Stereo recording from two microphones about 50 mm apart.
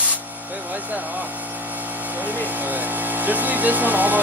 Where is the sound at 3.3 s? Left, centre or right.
Right.